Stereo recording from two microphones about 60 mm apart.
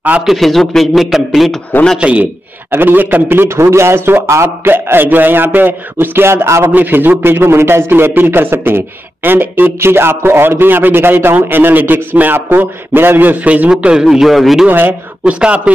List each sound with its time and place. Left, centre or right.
0.2 s a man's voice: centre
2.0 s a man's voice: right
2.7 s a man's voice: right
6.7 s a man's voice: right
7.2 s a man's voice: right
13.7 s a man's voice: centre
14.0 s a man's voice: centre
14.7 s a man's voice: right
15.2 s a man's voice: centre